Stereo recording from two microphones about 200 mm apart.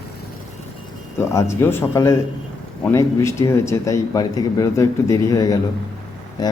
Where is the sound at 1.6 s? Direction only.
10° left (ahead or behind).